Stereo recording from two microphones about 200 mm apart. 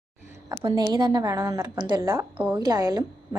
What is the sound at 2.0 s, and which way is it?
A woman's voice, 10° right (ahead or behind).